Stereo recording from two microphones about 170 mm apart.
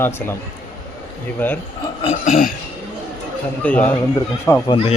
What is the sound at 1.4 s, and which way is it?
Speech, 10° left (ahead or behind).